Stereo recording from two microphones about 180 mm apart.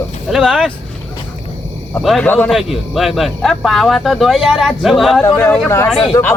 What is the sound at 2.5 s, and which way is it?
A man's voice, centre (ahead or behind).